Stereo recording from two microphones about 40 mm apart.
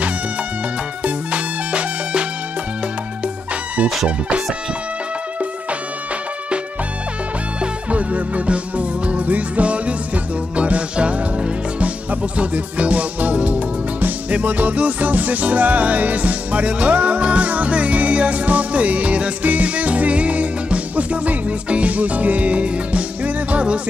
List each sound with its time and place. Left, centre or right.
1.0 s music: right
7.6 s music: right